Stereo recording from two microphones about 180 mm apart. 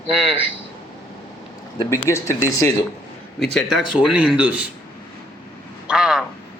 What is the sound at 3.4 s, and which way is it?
A man's voice, centre (ahead or behind).